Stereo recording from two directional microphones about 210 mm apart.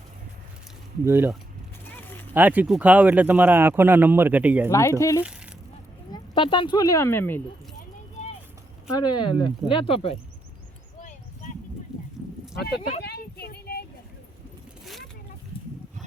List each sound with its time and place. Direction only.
1.0 s speech: 10° right (ahead or behind)
2.0 s a sound: 10° left (ahead or behind)
2.3 s speech: 10° right (ahead or behind)
4.7 s speech: 15° left (ahead or behind)
8.9 s speech: 20° left (ahead or behind)
13.0 s a sound: 50° left (ahead or behind)